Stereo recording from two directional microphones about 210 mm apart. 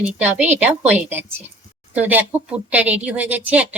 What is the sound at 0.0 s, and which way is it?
Speech, 5° right (ahead or behind).